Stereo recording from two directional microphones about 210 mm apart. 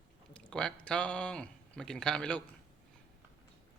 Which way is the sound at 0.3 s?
5° left (ahead or behind).